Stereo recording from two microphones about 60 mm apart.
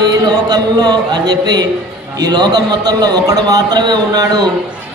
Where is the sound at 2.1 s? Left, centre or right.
Right.